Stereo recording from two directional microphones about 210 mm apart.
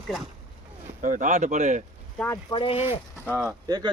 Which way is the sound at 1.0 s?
40° right (ahead or behind).